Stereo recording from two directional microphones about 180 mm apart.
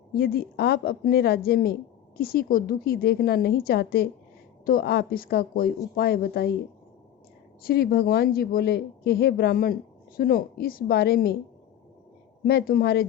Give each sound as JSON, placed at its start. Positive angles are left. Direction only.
{"t": 0.1, "sound": "speech", "side_deg": 60}
{"t": 7.6, "sound": "speech", "side_deg": 60}
{"t": 12.5, "sound": "speech", "side_deg": 60}